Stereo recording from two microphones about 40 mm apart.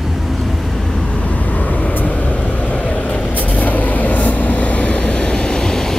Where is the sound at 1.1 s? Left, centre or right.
Left; by 5.9 s centre.